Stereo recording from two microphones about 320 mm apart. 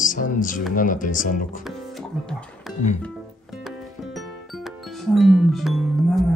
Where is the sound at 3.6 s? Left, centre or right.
Centre.